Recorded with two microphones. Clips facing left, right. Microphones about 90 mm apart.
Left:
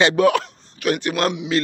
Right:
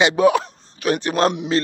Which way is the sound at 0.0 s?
20° right (ahead or behind).